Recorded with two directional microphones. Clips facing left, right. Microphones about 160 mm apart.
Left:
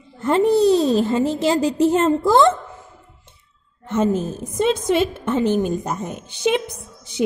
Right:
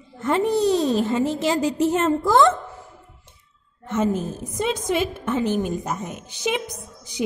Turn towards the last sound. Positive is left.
turn(degrees=25)  # may be behind; listen again after turning